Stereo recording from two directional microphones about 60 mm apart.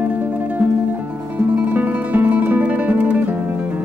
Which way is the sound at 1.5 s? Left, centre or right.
Right.